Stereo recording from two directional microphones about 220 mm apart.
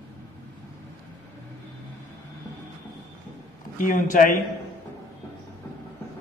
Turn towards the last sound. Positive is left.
turn(degrees=40)  # may be behind; listen again after turning